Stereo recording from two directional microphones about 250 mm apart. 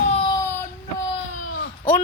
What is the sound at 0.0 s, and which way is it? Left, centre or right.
Baby cry, left.